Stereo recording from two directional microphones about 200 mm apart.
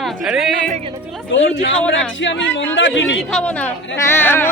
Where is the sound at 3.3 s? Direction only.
5° left (ahead or behind).